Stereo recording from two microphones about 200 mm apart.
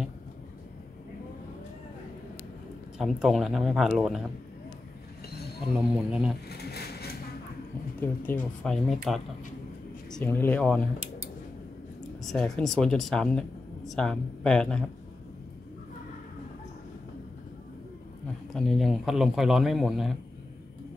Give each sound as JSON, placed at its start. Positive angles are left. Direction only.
{"t": 3.0, "sound": "speech", "side_deg": 0}
{"t": 6.0, "sound": "speech", "side_deg": -5}
{"t": 6.5, "sound": "a sound", "side_deg": 55}
{"t": 8.0, "sound": "speech", "side_deg": 10}
{"t": 12.2, "sound": "speech", "side_deg": 0}
{"t": 18.5, "sound": "speech", "side_deg": 0}